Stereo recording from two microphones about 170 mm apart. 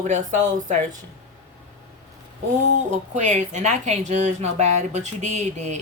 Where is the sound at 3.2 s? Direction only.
45° right (ahead or behind).